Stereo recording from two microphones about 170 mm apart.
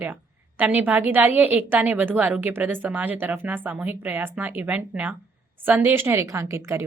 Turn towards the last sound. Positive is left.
turn(degrees=-15)  # may be behind; listen again after turning